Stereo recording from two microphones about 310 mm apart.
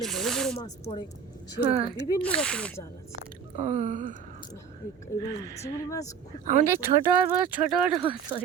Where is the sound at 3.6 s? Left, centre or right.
Right.